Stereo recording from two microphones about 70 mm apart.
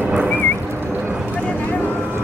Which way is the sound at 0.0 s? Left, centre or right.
Centre.